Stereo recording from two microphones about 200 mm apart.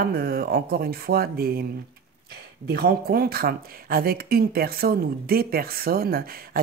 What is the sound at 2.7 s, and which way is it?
Speech, 50° right (ahead or behind).